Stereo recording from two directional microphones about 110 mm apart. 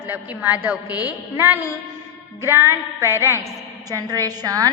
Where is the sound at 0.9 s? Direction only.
35° left (ahead or behind).